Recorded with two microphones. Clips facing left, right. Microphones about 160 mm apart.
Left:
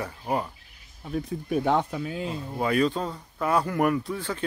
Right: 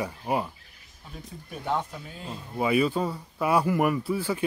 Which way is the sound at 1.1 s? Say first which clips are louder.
Left 14 dB; 70° left (ahead or behind).